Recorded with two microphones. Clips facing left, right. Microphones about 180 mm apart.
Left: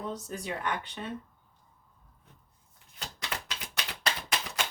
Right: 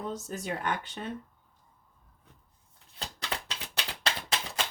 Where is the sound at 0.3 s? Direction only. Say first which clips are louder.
Right 1 dB; 45° right (ahead or behind).